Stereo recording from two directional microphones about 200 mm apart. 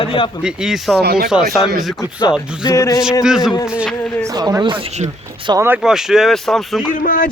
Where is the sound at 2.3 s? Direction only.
5° right (ahead or behind).